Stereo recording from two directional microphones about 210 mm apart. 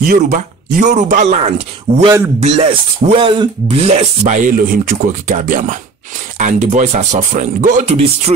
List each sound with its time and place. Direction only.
0.0 s speech: 40° right (ahead or behind)